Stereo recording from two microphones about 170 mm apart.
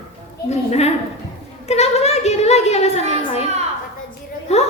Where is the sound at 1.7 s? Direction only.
40° left (ahead or behind).